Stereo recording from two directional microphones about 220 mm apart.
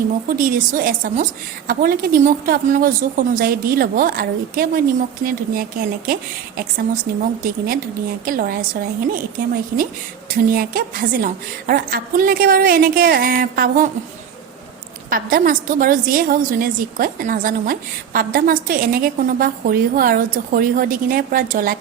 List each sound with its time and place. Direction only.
0.3 s a woman's voice: 40° right (ahead or behind)
10.5 s a woman's voice: 40° right (ahead or behind)
15.1 s a woman's voice: 40° right (ahead or behind)